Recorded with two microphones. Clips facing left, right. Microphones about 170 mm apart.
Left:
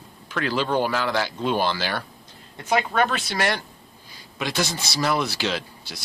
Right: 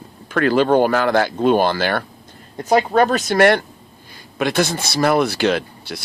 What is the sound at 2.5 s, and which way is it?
Speech, 40° right (ahead or behind).